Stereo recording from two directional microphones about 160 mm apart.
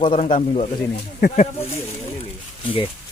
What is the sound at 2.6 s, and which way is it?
Speech, 30° left (ahead or behind).